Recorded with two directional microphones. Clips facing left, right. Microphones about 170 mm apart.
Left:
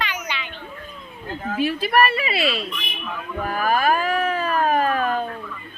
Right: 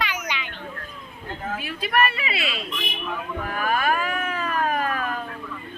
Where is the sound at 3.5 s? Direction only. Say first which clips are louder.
Left 4 dB; 30° left (ahead or behind).